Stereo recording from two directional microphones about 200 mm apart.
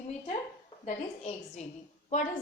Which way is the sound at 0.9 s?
35° left (ahead or behind).